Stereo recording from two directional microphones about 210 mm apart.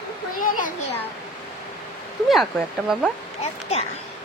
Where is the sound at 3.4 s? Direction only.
30° left (ahead or behind).